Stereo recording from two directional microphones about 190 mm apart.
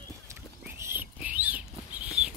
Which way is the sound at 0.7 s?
10° right (ahead or behind).